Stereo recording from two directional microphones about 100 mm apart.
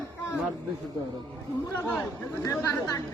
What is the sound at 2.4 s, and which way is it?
Speech, 25° left (ahead or behind).